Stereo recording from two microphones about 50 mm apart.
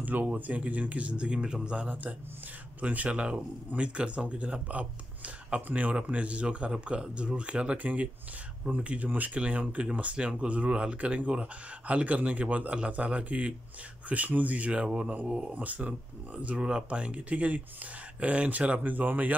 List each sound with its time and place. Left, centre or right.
0.0 s speech: right
15.5 s speech: right
16.5 s speech: centre